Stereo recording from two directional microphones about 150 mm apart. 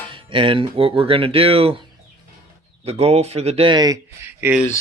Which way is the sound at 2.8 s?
45° right (ahead or behind).